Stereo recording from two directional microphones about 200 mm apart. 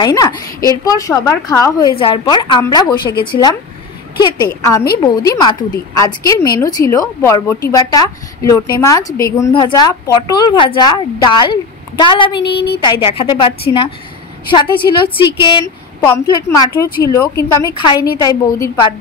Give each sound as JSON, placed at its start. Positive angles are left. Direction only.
{"t": 0.0, "sound": "a woman's voice", "side_deg": 20}